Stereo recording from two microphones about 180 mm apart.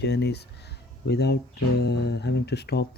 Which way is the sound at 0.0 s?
70° left (ahead or behind).